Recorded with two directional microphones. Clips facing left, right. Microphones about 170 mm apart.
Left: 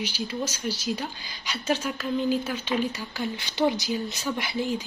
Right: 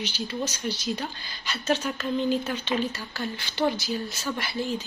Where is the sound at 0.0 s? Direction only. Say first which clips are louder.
Even; 10° left (ahead or behind).